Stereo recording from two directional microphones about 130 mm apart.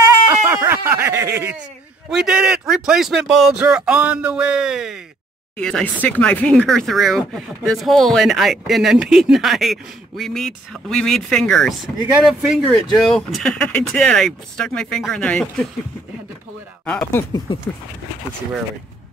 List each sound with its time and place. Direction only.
0.3 s a sound: 20° right (ahead or behind)
2.0 s speech: 5° right (ahead or behind)
16.8 s speech: 15° left (ahead or behind)